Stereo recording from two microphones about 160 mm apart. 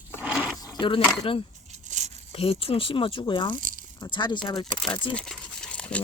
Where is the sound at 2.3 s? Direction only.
35° left (ahead or behind).